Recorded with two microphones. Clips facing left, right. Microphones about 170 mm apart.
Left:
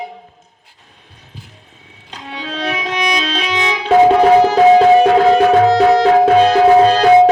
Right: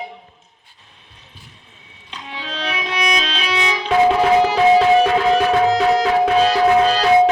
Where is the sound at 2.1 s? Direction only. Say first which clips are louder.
Left 4 dB; 45° left (ahead or behind).